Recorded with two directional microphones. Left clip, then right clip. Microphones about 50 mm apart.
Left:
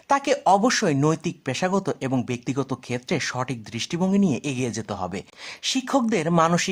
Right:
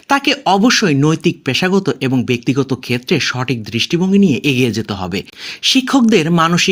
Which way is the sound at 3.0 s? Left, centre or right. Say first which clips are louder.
Right 9 dB; left.